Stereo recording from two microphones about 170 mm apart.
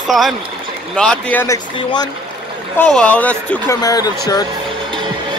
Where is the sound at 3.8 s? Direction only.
20° left (ahead or behind).